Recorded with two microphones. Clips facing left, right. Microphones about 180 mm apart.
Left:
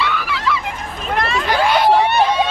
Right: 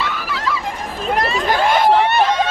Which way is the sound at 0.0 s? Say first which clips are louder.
Left 2 dB; 40° right (ahead or behind).